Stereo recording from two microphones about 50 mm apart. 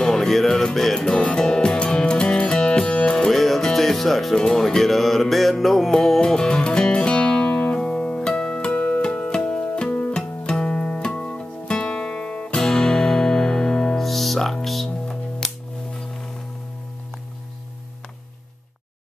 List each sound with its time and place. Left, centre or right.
0.0 s music: centre
0.9 s music: centre
3.3 s music: centre; by 8.3 s left
8.3 s music: centre
9.8 s music: left
10.1 s music: centre
14.0 s music: centre